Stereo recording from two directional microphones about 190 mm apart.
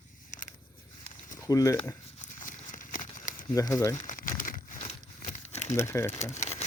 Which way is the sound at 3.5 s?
15° left (ahead or behind).